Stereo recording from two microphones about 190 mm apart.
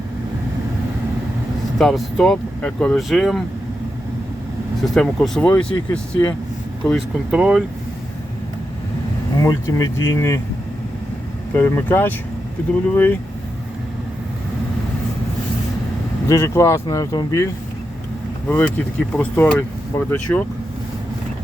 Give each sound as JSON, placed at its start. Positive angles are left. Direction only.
{"t": 1.8, "sound": "speech", "side_deg": 5}
{"t": 4.9, "sound": "speech", "side_deg": 5}
{"t": 9.4, "sound": "speech", "side_deg": 20}
{"t": 11.5, "sound": "speech", "side_deg": 10}
{"t": 16.2, "sound": "speech", "side_deg": 15}